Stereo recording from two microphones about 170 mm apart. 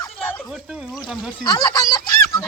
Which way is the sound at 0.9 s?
Centre (ahead or behind).